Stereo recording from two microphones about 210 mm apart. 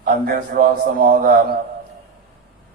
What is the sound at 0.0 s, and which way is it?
A man's voice, 40° right (ahead or behind).